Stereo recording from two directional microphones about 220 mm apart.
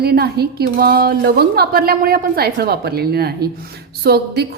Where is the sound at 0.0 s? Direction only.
45° right (ahead or behind).